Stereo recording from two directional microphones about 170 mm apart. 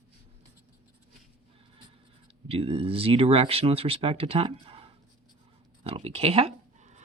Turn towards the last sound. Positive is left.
turn(degrees=-40)  # may be behind; listen again after turning